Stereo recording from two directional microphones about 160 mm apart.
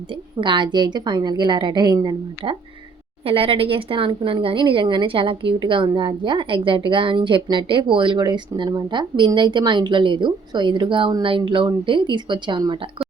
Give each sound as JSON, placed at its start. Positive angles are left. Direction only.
{"t": 0.1, "sound": "a woman's voice", "side_deg": -30}